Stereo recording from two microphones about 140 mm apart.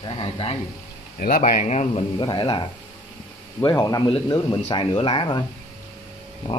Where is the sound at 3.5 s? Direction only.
20° left (ahead or behind).